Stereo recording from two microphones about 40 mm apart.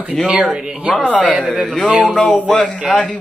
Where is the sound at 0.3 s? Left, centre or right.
Right.